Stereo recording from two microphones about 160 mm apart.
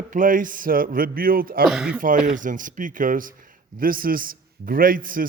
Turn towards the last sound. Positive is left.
turn(degrees=-60)  # may be behind; listen again after turning